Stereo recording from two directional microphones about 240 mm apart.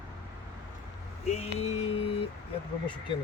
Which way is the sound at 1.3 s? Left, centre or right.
Left.